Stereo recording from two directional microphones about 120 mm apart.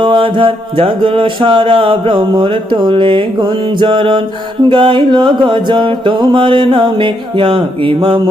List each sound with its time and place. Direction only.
0.0 s mantra: 45° right (ahead or behind)